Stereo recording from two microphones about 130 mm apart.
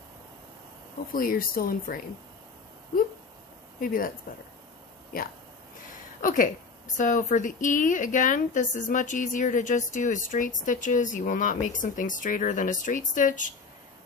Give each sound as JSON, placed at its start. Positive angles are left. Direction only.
{"t": 1.1, "sound": "a woman's voice", "side_deg": 90}
{"t": 3.8, "sound": "a woman's voice", "side_deg": 90}
{"t": 5.9, "sound": "a sound", "side_deg": 90}
{"t": 7.0, "sound": "speech", "side_deg": 80}